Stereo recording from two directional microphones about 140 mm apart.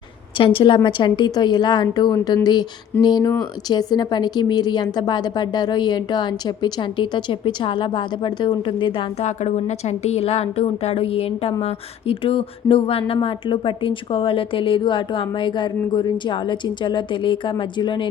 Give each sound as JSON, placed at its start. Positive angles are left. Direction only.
{"t": 0.3, "sound": "speech", "side_deg": 35}
{"t": 9.2, "sound": "a woman's voice", "side_deg": 55}